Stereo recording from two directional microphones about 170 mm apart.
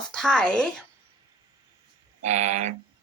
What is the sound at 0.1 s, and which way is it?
Speech, 5° left (ahead or behind).